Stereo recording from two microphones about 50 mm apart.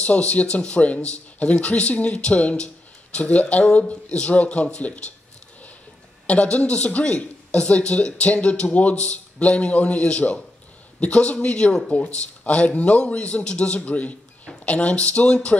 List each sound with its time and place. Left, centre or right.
0.0 s speech: left
6.2 s speech: left